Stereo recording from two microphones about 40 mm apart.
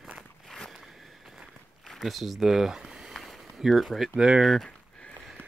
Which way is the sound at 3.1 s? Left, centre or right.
Centre.